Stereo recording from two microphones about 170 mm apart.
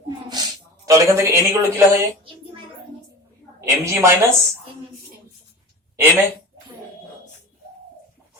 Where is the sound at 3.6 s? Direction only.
15° right (ahead or behind).